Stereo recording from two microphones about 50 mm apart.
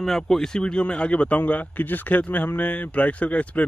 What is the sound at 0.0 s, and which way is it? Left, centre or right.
Speech, centre.